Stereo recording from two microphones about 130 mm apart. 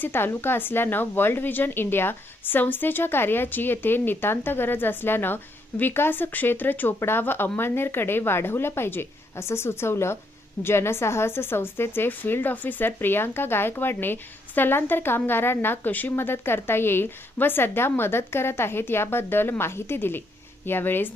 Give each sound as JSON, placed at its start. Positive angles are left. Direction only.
{"t": 0.0, "sound": "speech", "side_deg": 15}